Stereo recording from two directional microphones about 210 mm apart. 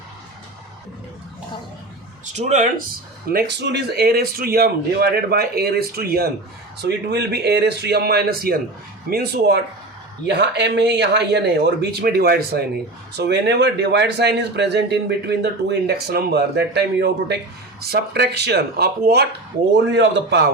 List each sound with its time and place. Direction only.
2.2 s speech: 35° right (ahead or behind)
3.3 s a man's voice: 55° right (ahead or behind)